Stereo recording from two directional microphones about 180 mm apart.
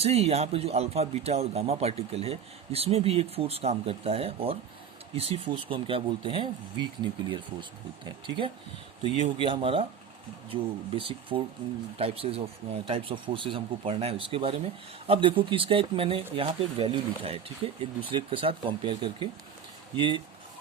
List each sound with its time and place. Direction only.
0.0 s a man's voice: 35° right (ahead or behind)